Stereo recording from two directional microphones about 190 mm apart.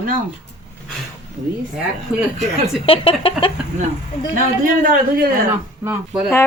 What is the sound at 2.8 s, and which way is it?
Speech, 30° left (ahead or behind).